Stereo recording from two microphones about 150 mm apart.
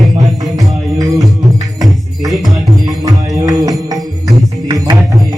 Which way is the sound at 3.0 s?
20° right (ahead or behind).